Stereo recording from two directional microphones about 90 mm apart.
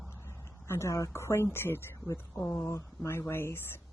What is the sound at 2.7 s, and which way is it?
Speech, 30° left (ahead or behind).